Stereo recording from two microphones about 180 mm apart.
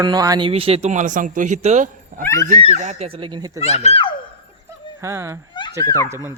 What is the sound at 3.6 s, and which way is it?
Speech, 35° left (ahead or behind).